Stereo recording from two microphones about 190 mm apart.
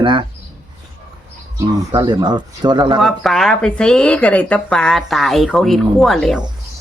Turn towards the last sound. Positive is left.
turn(degrees=0)  # may be behind; listen again after turning